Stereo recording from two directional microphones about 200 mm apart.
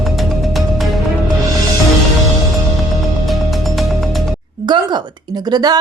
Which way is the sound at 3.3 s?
Centre (ahead or behind).